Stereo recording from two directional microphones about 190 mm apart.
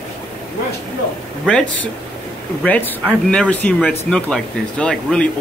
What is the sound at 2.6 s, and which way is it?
Speech, 10° left (ahead or behind).